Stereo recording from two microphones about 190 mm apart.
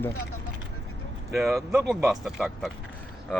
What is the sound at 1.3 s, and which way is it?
Speech, centre (ahead or behind).